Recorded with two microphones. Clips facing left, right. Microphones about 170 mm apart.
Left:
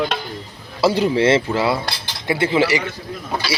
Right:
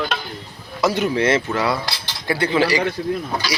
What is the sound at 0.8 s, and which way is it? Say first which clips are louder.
Speech: left 3 dB; 30° left (ahead or behind).